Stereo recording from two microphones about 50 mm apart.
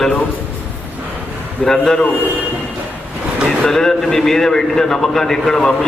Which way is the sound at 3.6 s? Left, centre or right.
Centre.